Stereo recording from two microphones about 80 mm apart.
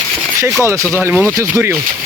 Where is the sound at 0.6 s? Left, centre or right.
Right.